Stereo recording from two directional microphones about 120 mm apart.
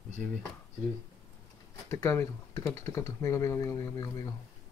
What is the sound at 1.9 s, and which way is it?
Speech, 25° left (ahead or behind).